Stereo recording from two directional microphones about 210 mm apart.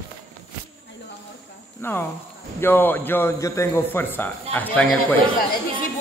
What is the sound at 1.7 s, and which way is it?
A man's voice, 10° left (ahead or behind).